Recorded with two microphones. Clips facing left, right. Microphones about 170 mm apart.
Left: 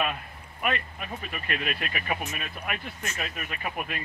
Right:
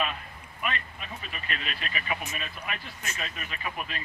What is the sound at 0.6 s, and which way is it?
Speech, 55° left (ahead or behind).